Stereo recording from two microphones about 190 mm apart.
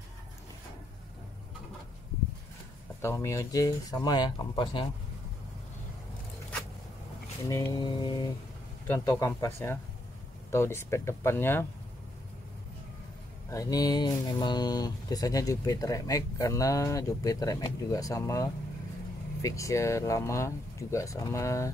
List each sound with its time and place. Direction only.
3.0 s speech: 15° left (ahead or behind)
7.4 s speech: 20° left (ahead or behind)
13.5 s speech: 20° left (ahead or behind)